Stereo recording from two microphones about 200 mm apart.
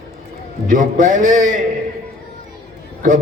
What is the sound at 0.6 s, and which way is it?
Speech, 40° right (ahead or behind).